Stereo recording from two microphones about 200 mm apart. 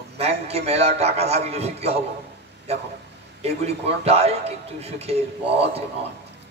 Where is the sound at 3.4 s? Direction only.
30° right (ahead or behind).